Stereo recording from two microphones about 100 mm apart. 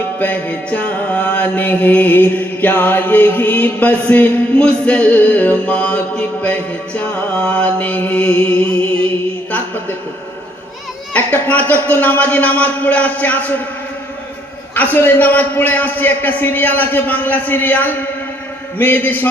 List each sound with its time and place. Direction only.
0.2 s mantra: 15° left (ahead or behind)
11.1 s mantra: 15° left (ahead or behind)
14.8 s a man's voice: 15° left (ahead or behind)